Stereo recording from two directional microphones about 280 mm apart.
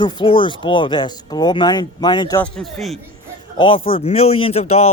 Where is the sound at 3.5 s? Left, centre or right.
Centre.